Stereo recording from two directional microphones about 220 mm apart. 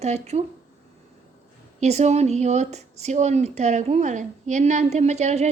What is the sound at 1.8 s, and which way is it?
Speech, 30° right (ahead or behind).